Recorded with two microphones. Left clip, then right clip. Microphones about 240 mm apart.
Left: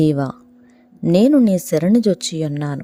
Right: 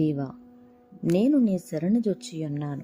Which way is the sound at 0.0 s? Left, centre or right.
Left.